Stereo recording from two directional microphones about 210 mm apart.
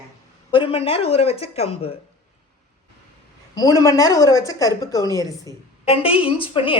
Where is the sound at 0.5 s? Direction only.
25° left (ahead or behind).